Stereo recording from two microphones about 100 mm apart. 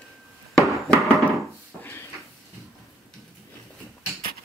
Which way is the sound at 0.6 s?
5° left (ahead or behind).